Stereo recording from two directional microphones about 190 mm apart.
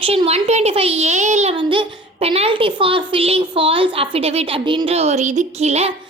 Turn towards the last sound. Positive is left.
turn(degrees=-35)  # may be behind; listen again after turning